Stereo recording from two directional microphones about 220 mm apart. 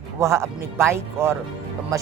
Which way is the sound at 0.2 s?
10° right (ahead or behind).